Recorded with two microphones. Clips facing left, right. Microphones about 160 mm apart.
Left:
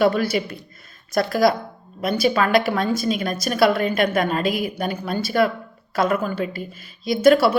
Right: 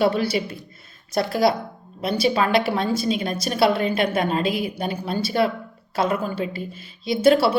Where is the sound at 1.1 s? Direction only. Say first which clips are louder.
Left 2 dB; 25° right (ahead or behind).